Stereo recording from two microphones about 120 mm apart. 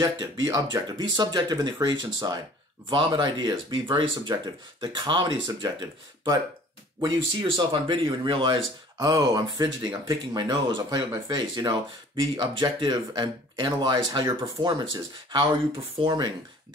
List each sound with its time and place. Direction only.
0.0 s speech: 35° right (ahead or behind)
16.0 s speech: 40° right (ahead or behind)